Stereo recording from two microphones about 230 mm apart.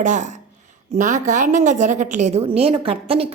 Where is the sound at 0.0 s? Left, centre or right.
Right.